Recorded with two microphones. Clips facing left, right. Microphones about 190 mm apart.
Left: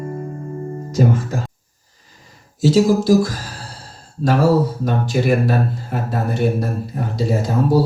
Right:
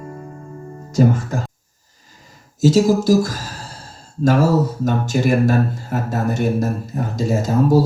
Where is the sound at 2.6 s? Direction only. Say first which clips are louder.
Even; 45° right (ahead or behind).